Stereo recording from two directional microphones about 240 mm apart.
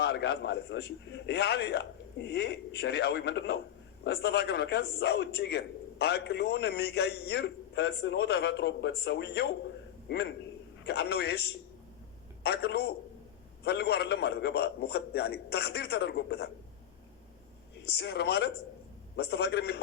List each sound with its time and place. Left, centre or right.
0.0 s a man's voice: left
17.8 s a man's voice: left